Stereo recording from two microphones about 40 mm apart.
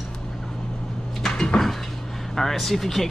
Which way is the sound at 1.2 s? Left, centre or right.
Centre.